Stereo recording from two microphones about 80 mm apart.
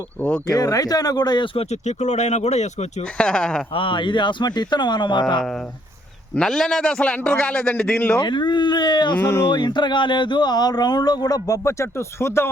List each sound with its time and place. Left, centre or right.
0.2 s speech: left
0.5 s speech: left
3.2 s a man's voice: centre
3.8 s speech: left
6.3 s a man's voice: centre
8.2 s speech: left
9.2 s speech: left
9.5 s speech: left